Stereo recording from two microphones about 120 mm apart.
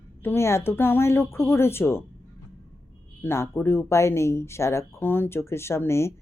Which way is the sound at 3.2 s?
20° left (ahead or behind).